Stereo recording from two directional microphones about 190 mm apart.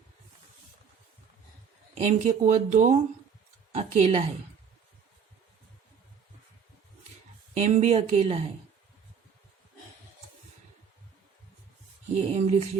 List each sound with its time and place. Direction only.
2.0 s speech: 40° right (ahead or behind)
7.6 s speech: 35° right (ahead or behind)
12.1 s speech: 35° right (ahead or behind)